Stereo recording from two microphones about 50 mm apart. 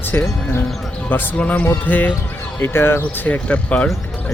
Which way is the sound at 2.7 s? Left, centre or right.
Left.